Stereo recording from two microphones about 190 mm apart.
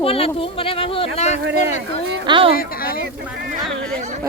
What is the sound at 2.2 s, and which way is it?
Speech, 25° right (ahead or behind).